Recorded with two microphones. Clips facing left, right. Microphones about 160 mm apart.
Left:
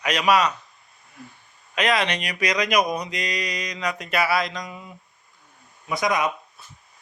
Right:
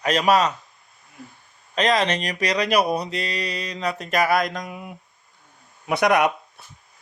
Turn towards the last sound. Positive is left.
turn(degrees=-65)  # may be behind; listen again after turning